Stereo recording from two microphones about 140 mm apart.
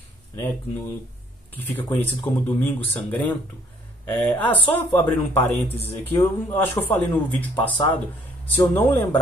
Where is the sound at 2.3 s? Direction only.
15° left (ahead or behind).